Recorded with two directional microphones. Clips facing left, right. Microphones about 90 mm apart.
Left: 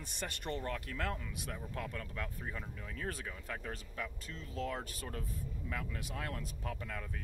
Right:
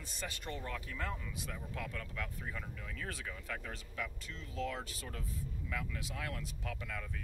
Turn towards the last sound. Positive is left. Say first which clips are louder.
# left 1 dB
turn(degrees=35)  # may be behind; listen again after turning